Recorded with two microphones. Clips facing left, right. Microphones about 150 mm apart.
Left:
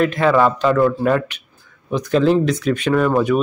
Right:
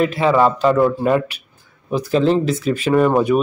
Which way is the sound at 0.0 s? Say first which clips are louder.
Even; 5° right (ahead or behind).